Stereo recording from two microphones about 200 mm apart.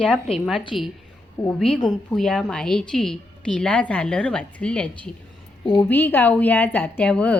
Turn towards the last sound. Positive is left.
turn(degrees=5)  # may be behind; listen again after turning